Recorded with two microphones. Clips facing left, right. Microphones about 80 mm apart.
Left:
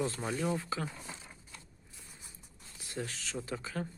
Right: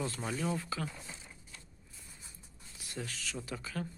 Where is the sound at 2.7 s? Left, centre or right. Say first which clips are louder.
Left 2 dB; left.